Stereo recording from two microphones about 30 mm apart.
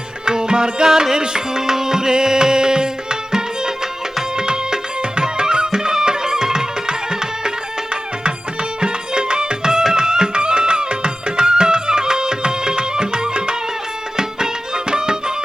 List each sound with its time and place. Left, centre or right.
0.3 s music: right
8.8 s music: right